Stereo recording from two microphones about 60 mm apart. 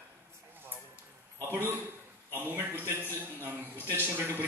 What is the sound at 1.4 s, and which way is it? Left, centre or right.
A man's voice, right.